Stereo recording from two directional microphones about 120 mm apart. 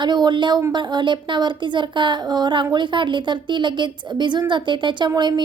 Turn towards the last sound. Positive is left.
turn(degrees=-35)  # may be behind; listen again after turning